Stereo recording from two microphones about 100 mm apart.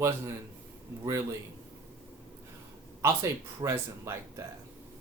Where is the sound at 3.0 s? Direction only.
25° right (ahead or behind).